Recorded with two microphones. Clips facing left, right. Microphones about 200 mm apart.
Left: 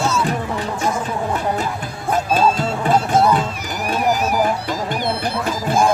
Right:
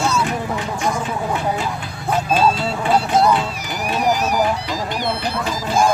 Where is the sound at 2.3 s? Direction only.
45° left (ahead or behind).